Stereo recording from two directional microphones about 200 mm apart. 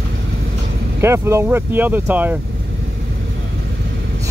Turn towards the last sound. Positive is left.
turn(degrees=-10)  # may be behind; listen again after turning